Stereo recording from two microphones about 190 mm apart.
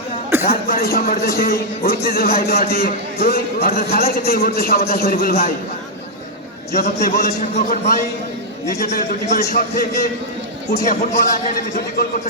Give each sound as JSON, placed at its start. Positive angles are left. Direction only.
{"t": 0.4, "sound": "a man's voice", "side_deg": 55}
{"t": 6.7, "sound": "a man's voice", "side_deg": 50}